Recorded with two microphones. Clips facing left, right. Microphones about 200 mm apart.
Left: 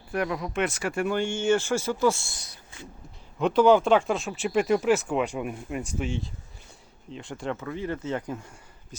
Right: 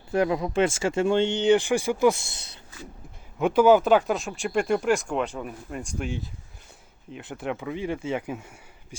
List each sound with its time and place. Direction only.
0.1 s speech: 25° right (ahead or behind)
3.3 s speech: 5° right (ahead or behind)